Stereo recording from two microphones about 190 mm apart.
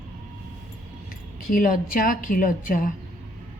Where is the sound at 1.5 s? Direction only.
45° left (ahead or behind).